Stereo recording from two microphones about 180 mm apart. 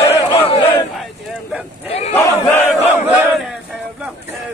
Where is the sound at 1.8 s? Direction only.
35° left (ahead or behind).